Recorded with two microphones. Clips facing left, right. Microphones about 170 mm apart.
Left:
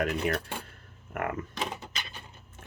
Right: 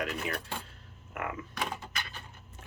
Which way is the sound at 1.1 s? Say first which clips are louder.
Left 5 dB; 50° left (ahead or behind).